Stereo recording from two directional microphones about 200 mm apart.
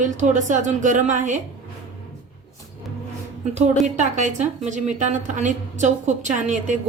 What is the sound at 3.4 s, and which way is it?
Speech, 35° right (ahead or behind).